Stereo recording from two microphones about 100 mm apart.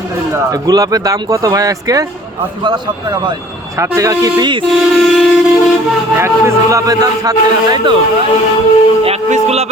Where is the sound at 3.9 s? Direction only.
35° right (ahead or behind).